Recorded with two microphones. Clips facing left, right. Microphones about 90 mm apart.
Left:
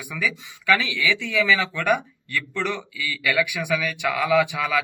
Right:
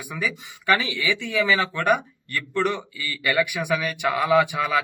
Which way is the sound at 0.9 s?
25° right (ahead or behind).